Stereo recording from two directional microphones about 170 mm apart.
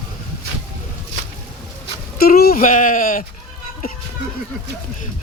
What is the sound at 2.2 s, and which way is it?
Sheep, 60° left (ahead or behind).